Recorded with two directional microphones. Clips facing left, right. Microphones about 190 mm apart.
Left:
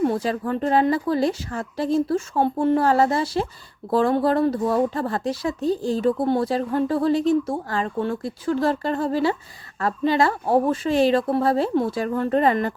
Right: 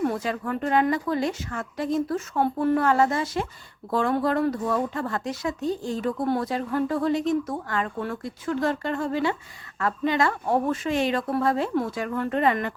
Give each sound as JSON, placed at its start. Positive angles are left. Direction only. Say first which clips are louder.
{"t": 0.0, "sound": "speech", "louder": "left 4 dB", "side_deg": 30}